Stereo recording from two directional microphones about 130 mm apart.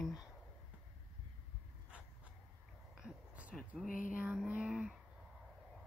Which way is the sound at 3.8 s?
90° left.